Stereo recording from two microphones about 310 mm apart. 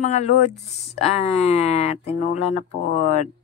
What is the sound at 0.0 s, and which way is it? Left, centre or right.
Speech, left.